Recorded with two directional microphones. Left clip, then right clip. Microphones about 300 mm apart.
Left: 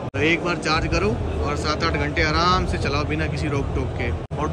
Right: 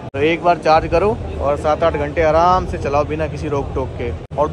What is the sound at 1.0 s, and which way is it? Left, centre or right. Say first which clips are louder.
Speech: right 7 dB; centre.